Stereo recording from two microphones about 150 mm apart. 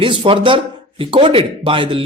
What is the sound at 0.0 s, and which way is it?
A man's voice, 35° right (ahead or behind).